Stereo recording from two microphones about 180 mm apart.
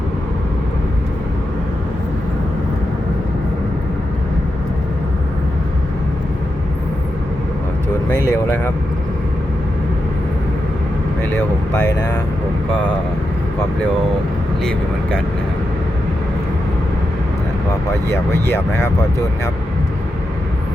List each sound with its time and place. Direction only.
8.3 s speech: 10° left (ahead or behind)
11.7 s speech: 15° left (ahead or behind)
18.4 s speech: 15° left (ahead or behind)